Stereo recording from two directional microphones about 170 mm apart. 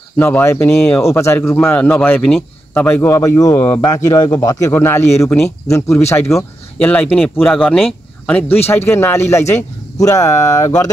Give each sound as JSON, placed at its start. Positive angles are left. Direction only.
{"t": 0.2, "sound": "speech", "side_deg": 10}